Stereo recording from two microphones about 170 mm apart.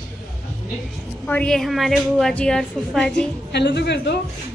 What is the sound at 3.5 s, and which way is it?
Speech, 85° left.